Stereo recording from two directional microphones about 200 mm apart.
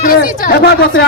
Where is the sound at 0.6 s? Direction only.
55° left (ahead or behind).